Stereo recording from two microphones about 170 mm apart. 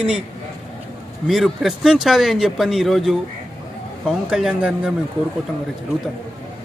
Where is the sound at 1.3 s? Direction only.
Centre (ahead or behind).